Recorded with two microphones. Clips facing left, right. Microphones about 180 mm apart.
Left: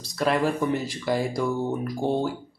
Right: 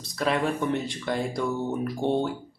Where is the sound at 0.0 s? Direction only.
Centre (ahead or behind).